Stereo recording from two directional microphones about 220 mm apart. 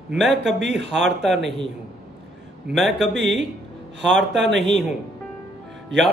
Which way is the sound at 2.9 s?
55° right (ahead or behind).